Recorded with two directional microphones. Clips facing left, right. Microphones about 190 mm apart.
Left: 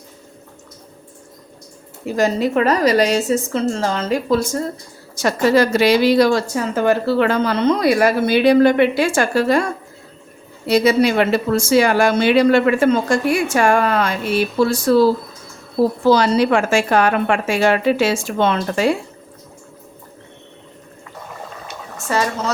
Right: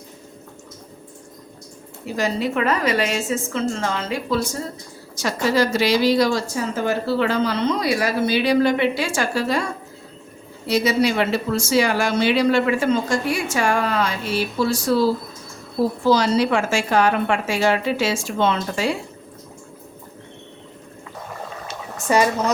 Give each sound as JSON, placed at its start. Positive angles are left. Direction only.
{"t": 2.1, "sound": "a woman's voice", "side_deg": 45}
{"t": 5.1, "sound": "speech", "side_deg": 55}
{"t": 10.7, "sound": "speech", "side_deg": 55}
{"t": 16.0, "sound": "speech", "side_deg": 55}
{"t": 22.1, "sound": "speech", "side_deg": -15}